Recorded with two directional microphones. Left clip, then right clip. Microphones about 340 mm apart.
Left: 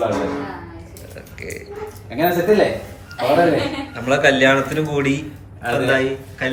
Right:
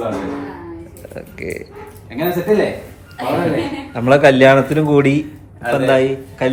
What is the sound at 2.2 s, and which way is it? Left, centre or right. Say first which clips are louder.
Speech: left 2 dB; centre.